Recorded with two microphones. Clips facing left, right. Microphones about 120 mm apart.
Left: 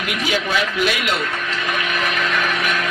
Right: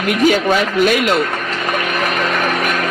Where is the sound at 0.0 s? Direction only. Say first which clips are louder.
Right 9 dB; 45° right (ahead or behind).